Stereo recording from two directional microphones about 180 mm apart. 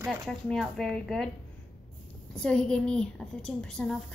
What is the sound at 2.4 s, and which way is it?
A woman's voice, 5° left (ahead or behind).